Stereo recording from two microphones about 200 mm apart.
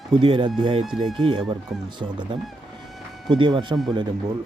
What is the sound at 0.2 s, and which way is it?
Speech, 25° right (ahead or behind).